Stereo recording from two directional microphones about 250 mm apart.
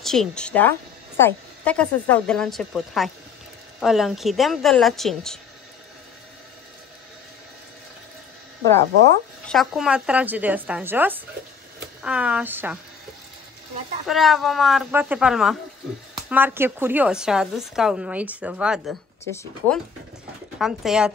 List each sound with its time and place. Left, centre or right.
0.0 s a woman's voice: centre
9.5 s a woman's voice: centre
14.0 s a woman's voice: centre
20.5 s a woman's voice: centre